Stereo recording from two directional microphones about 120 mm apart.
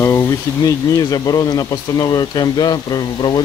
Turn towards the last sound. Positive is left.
turn(degrees=35)  # may be behind; listen again after turning